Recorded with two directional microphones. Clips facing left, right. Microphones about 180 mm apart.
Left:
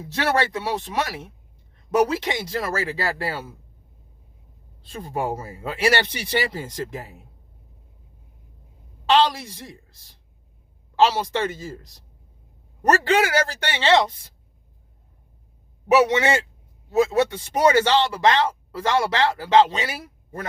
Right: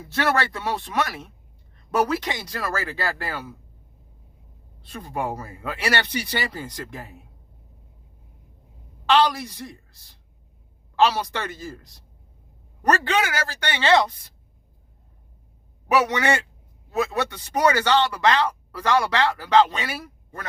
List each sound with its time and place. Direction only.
0.1 s speech: 20° left (ahead or behind)
4.9 s speech: 25° left (ahead or behind)
9.0 s speech: 25° left (ahead or behind)
10.9 s speech: 25° left (ahead or behind)
12.8 s speech: 25° left (ahead or behind)
15.9 s speech: 25° left (ahead or behind)